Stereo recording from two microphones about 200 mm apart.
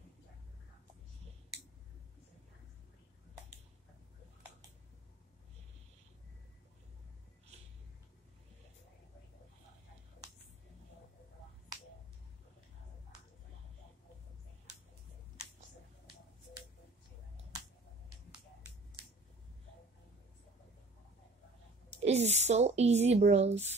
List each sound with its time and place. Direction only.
22.0 s speech: 35° right (ahead or behind)